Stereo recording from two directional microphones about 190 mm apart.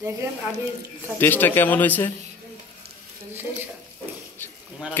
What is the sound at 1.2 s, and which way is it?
Speech, 10° left (ahead or behind).